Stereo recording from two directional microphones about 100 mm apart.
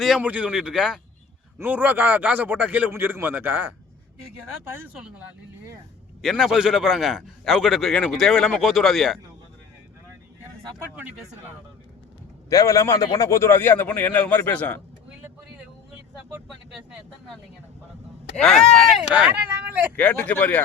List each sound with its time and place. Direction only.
0.2 s speech: 15° right (ahead or behind)
1.5 s a man's voice: 20° right (ahead or behind)
5.0 s speech: 15° right (ahead or behind)
6.2 s a man's voice: centre (ahead or behind)
12.5 s a man's voice: 35° left (ahead or behind); by 14.8 s 15° left (ahead or behind)
18.3 s a man's voice: 5° left (ahead or behind)
19.1 s speech: 15° right (ahead or behind)
20.0 s speech: 15° left (ahead or behind)